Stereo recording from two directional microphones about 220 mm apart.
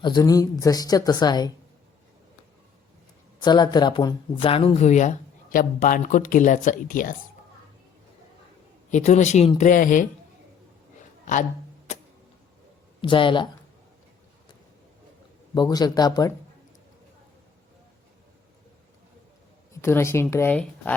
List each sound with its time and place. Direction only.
0.0 s speech: 20° left (ahead or behind)
3.4 s speech: 20° left (ahead or behind); by 7.2 s 40° left (ahead or behind)
8.9 s speech: 35° left (ahead or behind)
11.9 s music: 30° left (ahead or behind)
13.0 s speech: 20° left (ahead or behind)
15.5 s speech: 20° left (ahead or behind)
19.8 s speech: 10° left (ahead or behind)